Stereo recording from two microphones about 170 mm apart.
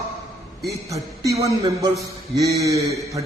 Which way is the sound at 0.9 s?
20° right (ahead or behind).